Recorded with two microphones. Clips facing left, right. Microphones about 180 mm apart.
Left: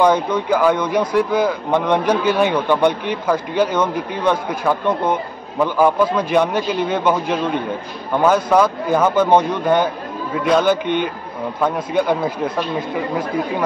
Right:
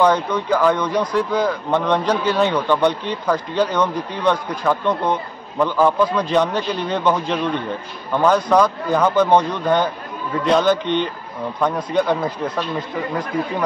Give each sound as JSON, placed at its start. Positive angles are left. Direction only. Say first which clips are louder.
{"t": 0.0, "sound": "speech", "louder": "left 1 dB", "side_deg": 10}